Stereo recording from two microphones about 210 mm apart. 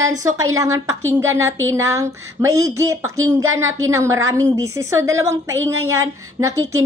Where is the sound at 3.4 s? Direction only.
70° right (ahead or behind).